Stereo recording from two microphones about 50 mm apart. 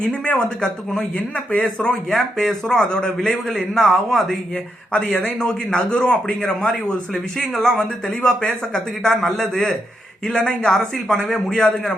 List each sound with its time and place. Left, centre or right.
0.0 s a man's voice: centre
2.0 s a man's voice: centre
4.5 s speech: left
5.4 s a man's voice: centre